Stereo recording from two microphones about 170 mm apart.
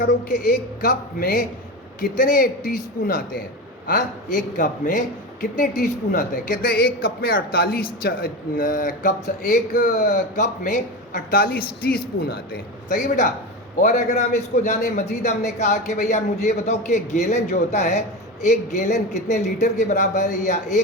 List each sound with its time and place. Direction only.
0.0 s a man's voice: 50° left (ahead or behind)
12.9 s speech: 45° left (ahead or behind)